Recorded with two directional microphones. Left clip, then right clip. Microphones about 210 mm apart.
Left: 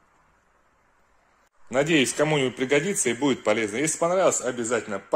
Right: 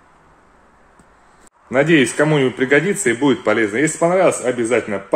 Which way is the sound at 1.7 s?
25° left (ahead or behind).